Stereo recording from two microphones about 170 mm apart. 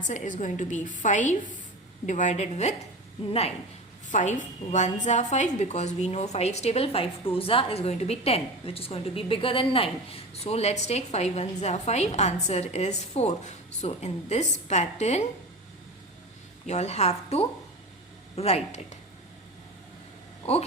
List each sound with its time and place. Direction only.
0.1 s a woman's voice: 45° left (ahead or behind)
4.1 s a woman's voice: 45° left (ahead or behind)
16.6 s a woman's voice: 40° left (ahead or behind)
20.4 s speech: 35° left (ahead or behind)